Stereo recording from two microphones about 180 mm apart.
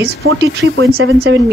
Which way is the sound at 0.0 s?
65° right (ahead or behind).